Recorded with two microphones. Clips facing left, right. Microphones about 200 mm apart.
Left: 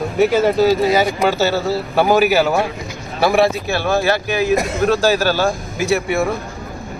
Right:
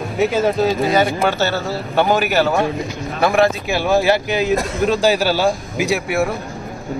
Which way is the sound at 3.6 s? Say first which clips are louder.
Right 2 dB; 15° right (ahead or behind).